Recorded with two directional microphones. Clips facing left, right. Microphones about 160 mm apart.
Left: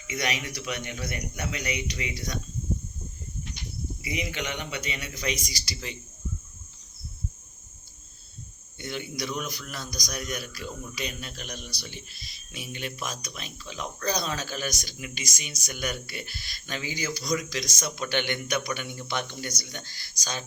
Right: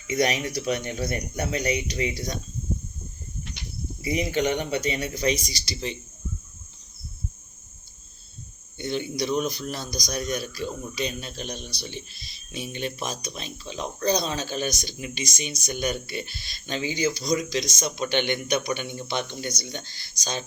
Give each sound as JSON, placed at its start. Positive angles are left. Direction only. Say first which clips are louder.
{"t": 0.1, "sound": "speech", "louder": "right 7 dB", "side_deg": -35}
{"t": 4.0, "sound": "speech", "louder": "right 9 dB", "side_deg": -35}
{"t": 8.8, "sound": "a man's voice", "louder": "right 6 dB", "side_deg": -25}